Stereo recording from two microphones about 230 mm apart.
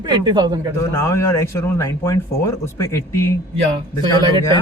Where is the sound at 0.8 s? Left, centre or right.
Centre.